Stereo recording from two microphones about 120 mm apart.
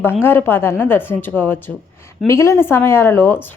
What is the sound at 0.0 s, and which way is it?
A woman's voice, 20° left (ahead or behind).